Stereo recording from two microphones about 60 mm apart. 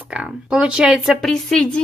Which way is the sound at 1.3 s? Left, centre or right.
Centre.